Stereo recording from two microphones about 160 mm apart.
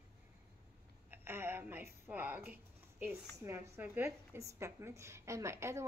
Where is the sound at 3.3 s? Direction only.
15° right (ahead or behind).